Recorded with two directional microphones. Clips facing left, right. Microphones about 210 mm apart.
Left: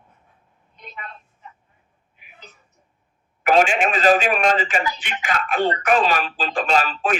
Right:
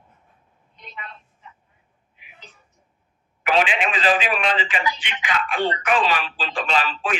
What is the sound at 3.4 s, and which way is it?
A man's voice, 45° left (ahead or behind).